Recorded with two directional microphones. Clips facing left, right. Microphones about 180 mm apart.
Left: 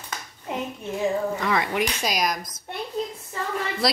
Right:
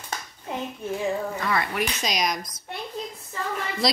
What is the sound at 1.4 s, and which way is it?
Speech, 15° left (ahead or behind).